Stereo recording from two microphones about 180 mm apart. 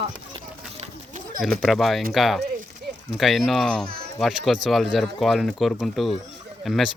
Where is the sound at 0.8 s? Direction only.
45° right (ahead or behind).